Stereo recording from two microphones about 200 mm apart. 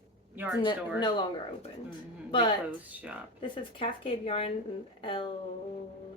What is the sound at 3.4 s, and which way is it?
Speech, 25° left (ahead or behind).